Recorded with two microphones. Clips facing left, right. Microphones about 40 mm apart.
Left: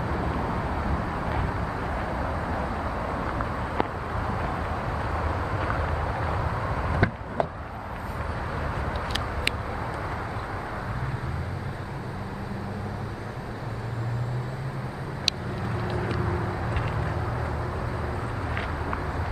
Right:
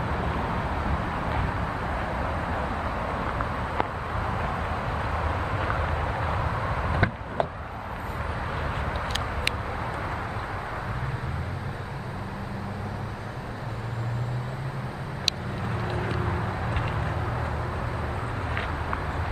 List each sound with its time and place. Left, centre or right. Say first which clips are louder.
0.0 s vehicle: even; right
15.8 s vehicle: left 1 dB; right